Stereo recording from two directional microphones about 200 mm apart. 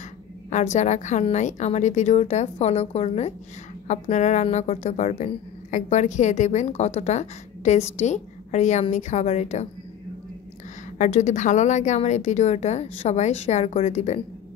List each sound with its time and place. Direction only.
0.5 s a woman's voice: 35° left (ahead or behind)
11.0 s a woman's voice: 35° left (ahead or behind)